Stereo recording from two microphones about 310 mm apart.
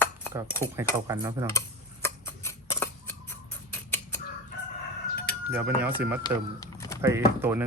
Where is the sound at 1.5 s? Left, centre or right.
Centre.